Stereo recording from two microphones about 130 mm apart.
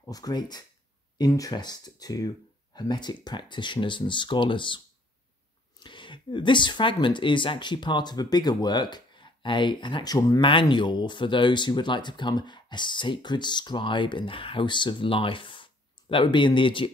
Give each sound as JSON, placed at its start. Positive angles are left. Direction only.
{"t": 0.1, "sound": "speech", "side_deg": 30}